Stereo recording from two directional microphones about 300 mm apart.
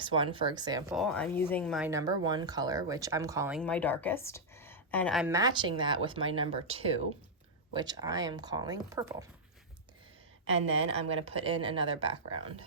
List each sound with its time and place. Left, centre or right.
0.0 s a woman's voice: centre
0.9 s speech: centre
1.9 s a woman's voice: centre
3.6 s a woman's voice: centre
10.8 s a woman's voice: centre